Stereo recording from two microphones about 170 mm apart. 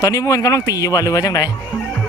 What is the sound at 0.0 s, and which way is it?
A man's voice, 20° left (ahead or behind).